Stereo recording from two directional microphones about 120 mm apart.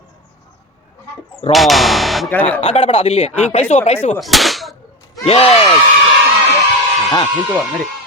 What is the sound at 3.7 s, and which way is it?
Speech, 75° left (ahead or behind).